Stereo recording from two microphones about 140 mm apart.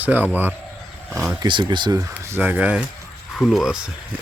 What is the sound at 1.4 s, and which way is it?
Speech, 35° right (ahead or behind).